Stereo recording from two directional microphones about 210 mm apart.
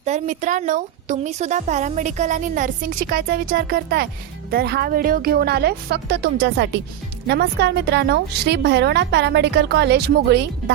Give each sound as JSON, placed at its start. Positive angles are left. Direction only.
{"t": 0.0, "sound": "a woman's voice", "side_deg": -35}